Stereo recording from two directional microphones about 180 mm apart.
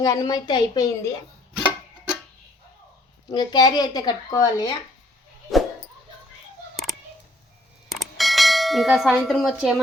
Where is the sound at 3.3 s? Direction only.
25° left (ahead or behind).